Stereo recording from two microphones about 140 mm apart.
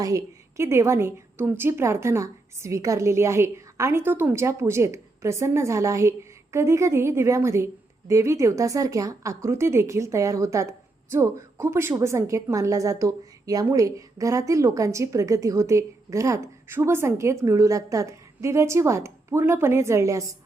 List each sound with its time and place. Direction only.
0.0 s a woman's voice: 20° right (ahead or behind)